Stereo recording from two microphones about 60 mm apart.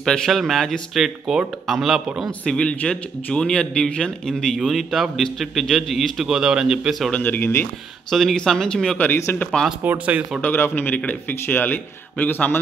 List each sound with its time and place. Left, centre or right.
0.0 s a man's voice: centre
2.4 s a man's voice: centre
7.2 s a man's voice: left
8.1 s a man's voice: centre
9.1 s a man's voice: left
9.8 s speech: right
10.5 s a man's voice: left